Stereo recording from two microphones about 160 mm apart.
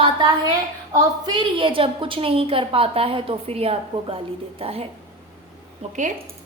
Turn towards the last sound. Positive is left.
turn(degrees=-40)  # may be behind; listen again after turning